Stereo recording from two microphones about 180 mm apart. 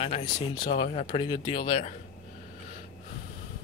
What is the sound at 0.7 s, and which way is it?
Speech, 35° left (ahead or behind).